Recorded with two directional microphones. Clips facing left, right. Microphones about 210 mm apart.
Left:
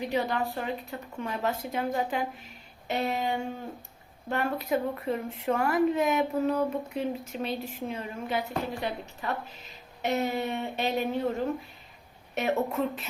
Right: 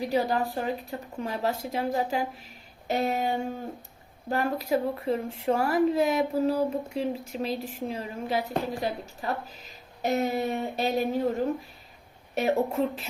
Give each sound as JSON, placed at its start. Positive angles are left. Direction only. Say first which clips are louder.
{"t": 0.0, "sound": "speech", "louder": "right 3 dB", "side_deg": -35}
{"t": 7.6, "sound": "a woman's voice", "louder": "right 2 dB", "side_deg": 0}
{"t": 7.9, "sound": "speech", "louder": "right 2 dB", "side_deg": -35}
{"t": 12.3, "sound": "speech", "louder": "right 3 dB", "side_deg": -35}